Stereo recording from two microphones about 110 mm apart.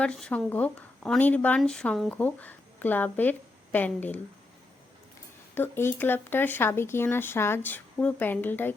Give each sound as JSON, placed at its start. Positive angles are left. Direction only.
{"t": 0.0, "sound": "speech", "side_deg": 10}
{"t": 5.5, "sound": "speech", "side_deg": 20}